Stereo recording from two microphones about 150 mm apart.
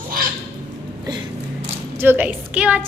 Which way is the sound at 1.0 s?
30° right (ahead or behind).